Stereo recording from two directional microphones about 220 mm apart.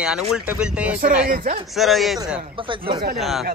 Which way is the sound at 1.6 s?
Centre (ahead or behind).